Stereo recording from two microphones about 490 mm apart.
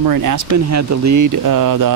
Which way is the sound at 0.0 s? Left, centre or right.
Right.